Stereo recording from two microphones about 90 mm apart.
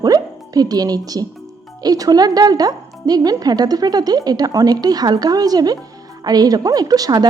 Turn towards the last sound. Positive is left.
turn(degrees=-45)  # may be behind; listen again after turning